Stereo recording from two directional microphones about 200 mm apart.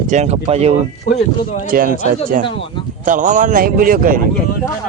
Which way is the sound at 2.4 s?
25° left (ahead or behind).